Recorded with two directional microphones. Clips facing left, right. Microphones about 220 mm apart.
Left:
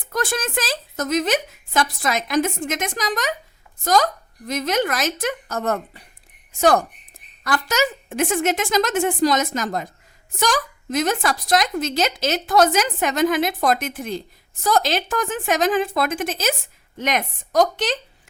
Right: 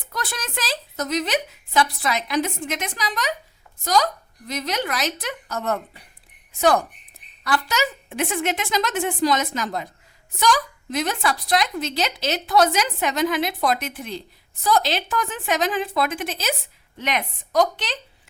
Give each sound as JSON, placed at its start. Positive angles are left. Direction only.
{"t": 0.1, "sound": "a woman's voice", "side_deg": 50}